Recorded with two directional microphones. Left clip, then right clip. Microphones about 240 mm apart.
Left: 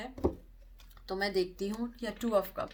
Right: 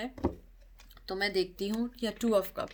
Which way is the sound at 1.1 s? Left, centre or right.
Right.